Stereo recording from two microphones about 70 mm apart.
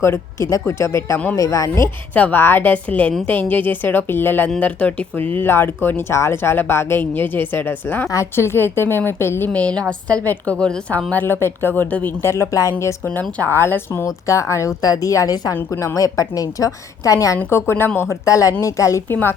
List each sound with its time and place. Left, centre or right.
0.0 s a woman's voice: left
1.4 s a woman's voice: left
2.1 s a woman's voice: left
2.7 s a woman's voice: centre
4.6 s a woman's voice: left
8.1 s speech: left
9.5 s a woman's voice: centre
11.1 s a woman's voice: left
12.2 s a woman's voice: left
13.1 s speech: left
14.8 s a woman's voice: left
18.3 s a woman's voice: left